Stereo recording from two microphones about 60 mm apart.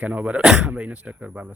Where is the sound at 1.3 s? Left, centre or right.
Right.